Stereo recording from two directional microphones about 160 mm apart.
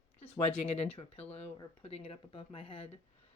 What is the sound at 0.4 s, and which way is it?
A woman's voice, 40° left (ahead or behind).